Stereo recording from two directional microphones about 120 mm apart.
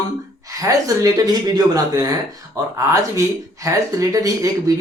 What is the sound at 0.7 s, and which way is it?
Speech, 30° right (ahead or behind).